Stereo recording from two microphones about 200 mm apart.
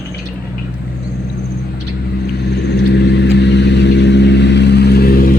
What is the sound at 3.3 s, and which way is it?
Vehicle, 60° left (ahead or behind).